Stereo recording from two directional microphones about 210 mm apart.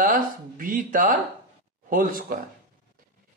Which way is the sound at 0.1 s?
40° right (ahead or behind).